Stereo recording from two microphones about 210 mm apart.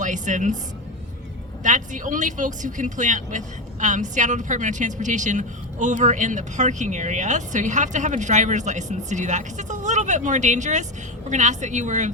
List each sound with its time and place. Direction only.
0.0 s a woman's voice: 35° right (ahead or behind)
1.6 s speech: 35° right (ahead or behind)